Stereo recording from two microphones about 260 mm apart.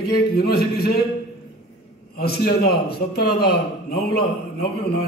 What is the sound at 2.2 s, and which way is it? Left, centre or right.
A man's voice, left.